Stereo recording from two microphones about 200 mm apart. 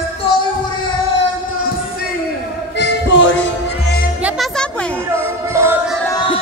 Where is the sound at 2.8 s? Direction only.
60° left (ahead or behind).